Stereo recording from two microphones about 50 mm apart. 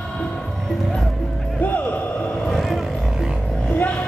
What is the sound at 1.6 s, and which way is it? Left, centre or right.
Music, left.